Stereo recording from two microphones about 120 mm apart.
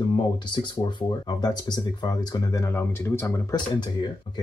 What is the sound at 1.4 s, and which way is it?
Speech, 35° left (ahead or behind).